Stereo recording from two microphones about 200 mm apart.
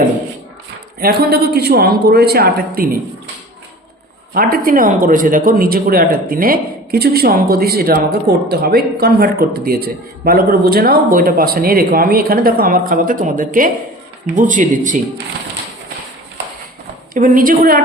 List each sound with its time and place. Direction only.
0.9 s speech: 50° right (ahead or behind)
4.4 s speech: 45° right (ahead or behind)
17.2 s speech: 40° right (ahead or behind)